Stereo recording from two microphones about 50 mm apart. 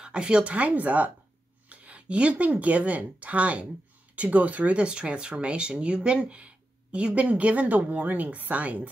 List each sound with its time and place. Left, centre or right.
0.0 s speech: centre